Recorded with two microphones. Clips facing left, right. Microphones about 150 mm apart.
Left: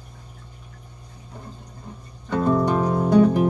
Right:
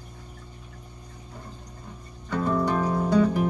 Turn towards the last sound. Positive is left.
turn(degrees=20)  # may be behind; listen again after turning